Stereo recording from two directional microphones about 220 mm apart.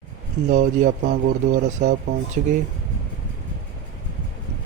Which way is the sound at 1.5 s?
35° right (ahead or behind).